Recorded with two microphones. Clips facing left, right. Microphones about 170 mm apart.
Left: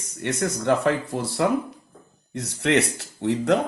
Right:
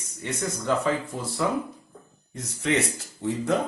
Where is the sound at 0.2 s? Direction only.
70° left (ahead or behind).